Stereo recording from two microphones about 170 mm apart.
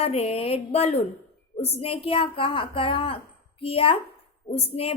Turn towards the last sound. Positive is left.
turn(degrees=35)  # may be behind; listen again after turning